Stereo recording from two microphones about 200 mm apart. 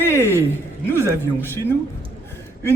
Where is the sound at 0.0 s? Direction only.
10° left (ahead or behind).